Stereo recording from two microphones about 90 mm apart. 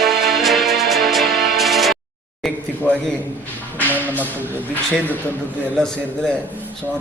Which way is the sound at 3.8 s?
20° left (ahead or behind).